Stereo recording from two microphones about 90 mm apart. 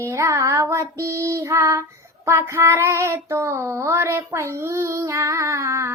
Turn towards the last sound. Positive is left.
turn(degrees=-35)  # may be behind; listen again after turning